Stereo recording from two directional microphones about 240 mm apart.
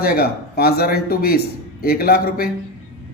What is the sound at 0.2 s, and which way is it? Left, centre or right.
Speech, left.